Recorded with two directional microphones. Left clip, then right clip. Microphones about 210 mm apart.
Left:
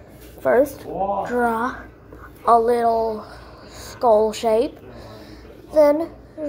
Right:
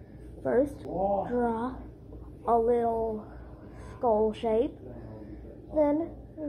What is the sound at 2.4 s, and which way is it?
Speech, 55° left (ahead or behind).